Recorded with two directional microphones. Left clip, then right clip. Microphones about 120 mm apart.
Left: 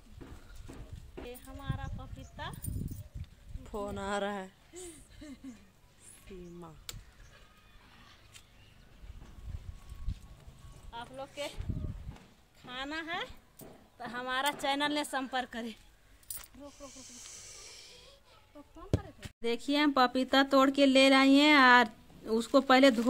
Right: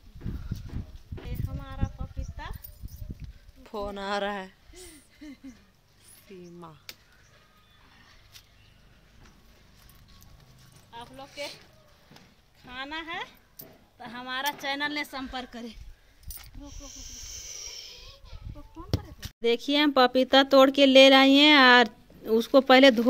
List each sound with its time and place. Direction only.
0.2 s horse: 40° left (ahead or behind)
1.6 s a sound: 15° left (ahead or behind)
3.6 s speech: 20° right (ahead or behind)
6.4 s speech: 20° right (ahead or behind)
10.9 s speech: 35° left (ahead or behind)
12.6 s a woman's voice: 25° left (ahead or behind); by 15.0 s 50° left (ahead or behind)
15.0 s a woman's voice: 85° left
16.7 s snake: 5° left (ahead or behind)
19.4 s speech: 25° right (ahead or behind)